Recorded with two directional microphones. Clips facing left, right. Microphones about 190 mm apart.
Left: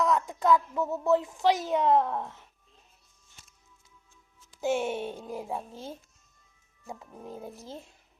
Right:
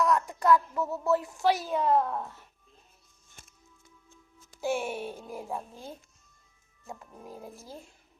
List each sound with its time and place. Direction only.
0.3 s a woman's voice: 20° left (ahead or behind)
0.7 s a sound: 20° left (ahead or behind)
1.3 s a woman's voice: 20° left (ahead or behind)
3.4 s music: 50° right (ahead or behind)
4.6 s a woman's voice: 20° left (ahead or behind)
5.2 s music: centre (ahead or behind)